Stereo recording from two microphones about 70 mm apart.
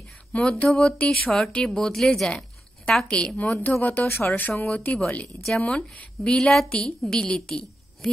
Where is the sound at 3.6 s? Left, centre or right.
Left.